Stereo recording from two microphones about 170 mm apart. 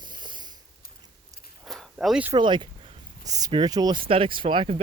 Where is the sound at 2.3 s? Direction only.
25° right (ahead or behind).